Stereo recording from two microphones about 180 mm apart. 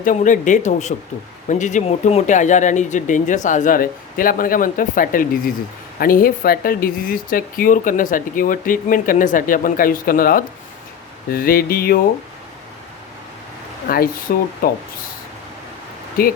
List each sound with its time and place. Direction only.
0.0 s speech: 45° left (ahead or behind)
11.3 s mantra: 55° left (ahead or behind)
13.8 s speech: 55° left (ahead or behind)